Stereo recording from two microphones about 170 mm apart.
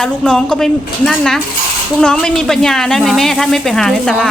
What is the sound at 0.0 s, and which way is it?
A woman's voice, 5° left (ahead or behind).